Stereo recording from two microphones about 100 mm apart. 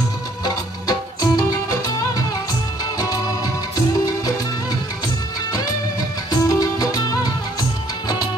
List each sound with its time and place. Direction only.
0.8 s music: 40° left (ahead or behind)
6.3 s music: 35° left (ahead or behind)